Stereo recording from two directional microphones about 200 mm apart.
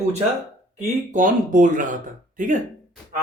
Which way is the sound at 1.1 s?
40° right (ahead or behind).